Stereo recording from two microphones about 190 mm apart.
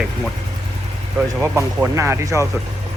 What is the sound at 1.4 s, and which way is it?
Speech, 15° right (ahead or behind).